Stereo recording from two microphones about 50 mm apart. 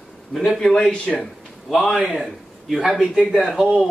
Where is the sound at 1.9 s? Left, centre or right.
Centre.